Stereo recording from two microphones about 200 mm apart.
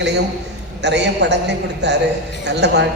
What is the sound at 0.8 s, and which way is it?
A woman's voice, 60° right (ahead or behind).